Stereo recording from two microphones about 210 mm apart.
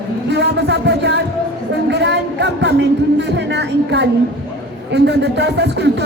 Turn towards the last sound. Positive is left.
turn(degrees=-55)  # may be behind; listen again after turning